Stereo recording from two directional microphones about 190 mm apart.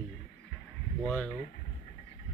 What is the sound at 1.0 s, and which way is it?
Speech, 5° left (ahead or behind).